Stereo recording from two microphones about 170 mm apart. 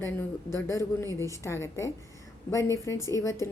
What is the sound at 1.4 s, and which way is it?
A woman's voice, 15° left (ahead or behind).